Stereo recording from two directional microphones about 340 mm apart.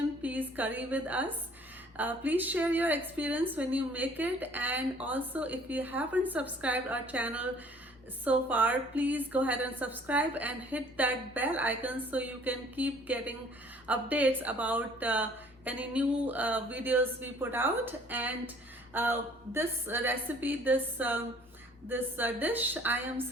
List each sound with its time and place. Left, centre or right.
0.2 s a woman's voice: centre